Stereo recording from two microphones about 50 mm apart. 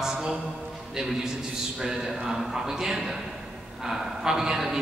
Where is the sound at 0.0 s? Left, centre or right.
Centre.